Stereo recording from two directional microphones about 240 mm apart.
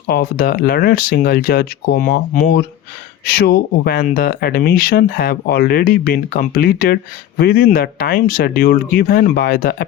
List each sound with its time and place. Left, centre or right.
0.1 s speech: left